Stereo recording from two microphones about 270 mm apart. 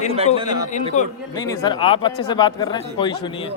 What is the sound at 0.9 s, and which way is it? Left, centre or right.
Speech, left.